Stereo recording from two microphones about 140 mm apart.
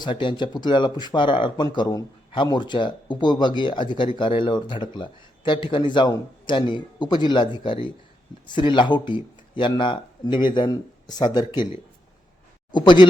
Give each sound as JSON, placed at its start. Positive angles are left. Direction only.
{"t": 0.0, "sound": "speech", "side_deg": 35}
{"t": 12.7, "sound": "speech", "side_deg": 35}